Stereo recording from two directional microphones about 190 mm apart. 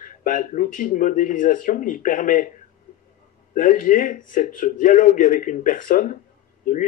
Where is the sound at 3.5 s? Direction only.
45° left (ahead or behind).